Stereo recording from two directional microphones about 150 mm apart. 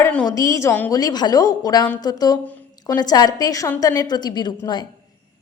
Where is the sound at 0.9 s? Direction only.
25° left (ahead or behind).